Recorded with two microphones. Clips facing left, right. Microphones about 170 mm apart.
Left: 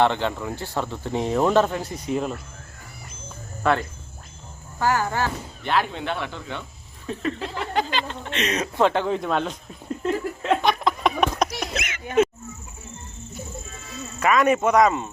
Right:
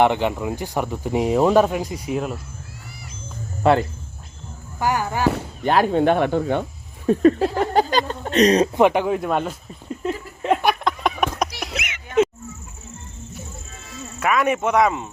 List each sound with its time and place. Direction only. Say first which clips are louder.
0.0 s speech: right 3 dB; 15° right (ahead or behind)
3.6 s speech: right 5 dB; 30° right (ahead or behind)
4.8 s speech: right 2 dB; 15° right (ahead or behind)
5.6 s speech: right 8 dB; 40° right (ahead or behind)
8.7 s speech: right 4 dB; 15° right (ahead or behind)
10.0 s a sound: left 2 dB; 10° right (ahead or behind)
10.8 s a sound: even; centre (ahead or behind)
11.3 s fowl: left 1 dB; 10° right (ahead or behind)
14.2 s speech: left 1 dB; 5° right (ahead or behind)